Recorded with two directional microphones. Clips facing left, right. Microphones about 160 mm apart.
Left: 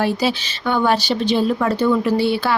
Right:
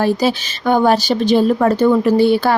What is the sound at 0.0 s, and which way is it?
A woman's voice, 45° right (ahead or behind).